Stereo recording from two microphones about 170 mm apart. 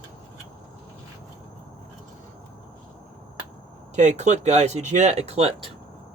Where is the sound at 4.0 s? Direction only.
45° right (ahead or behind).